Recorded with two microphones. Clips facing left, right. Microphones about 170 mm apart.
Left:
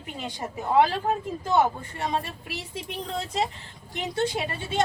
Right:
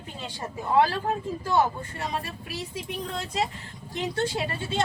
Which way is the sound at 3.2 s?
25° left (ahead or behind).